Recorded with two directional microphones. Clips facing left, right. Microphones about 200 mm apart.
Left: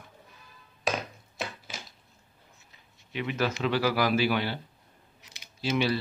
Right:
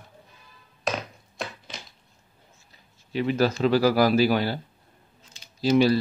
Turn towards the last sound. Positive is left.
turn(degrees=-40)  # may be behind; listen again after turning